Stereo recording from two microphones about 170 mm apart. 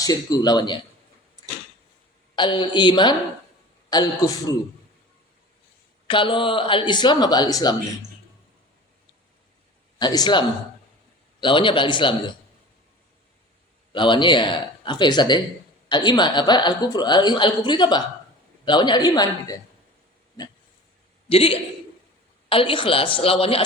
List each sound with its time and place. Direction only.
0.0 s a woman's voice: 20° left (ahead or behind)
2.3 s a woman's voice: 25° left (ahead or behind)
6.1 s a woman's voice: 30° left (ahead or behind)
10.0 s a woman's voice: 25° left (ahead or behind)
13.9 s a woman's voice: 30° left (ahead or behind)
21.2 s a man's voice: 35° left (ahead or behind)